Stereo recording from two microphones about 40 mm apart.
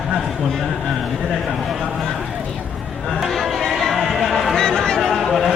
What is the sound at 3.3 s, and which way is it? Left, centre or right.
Chatter, centre.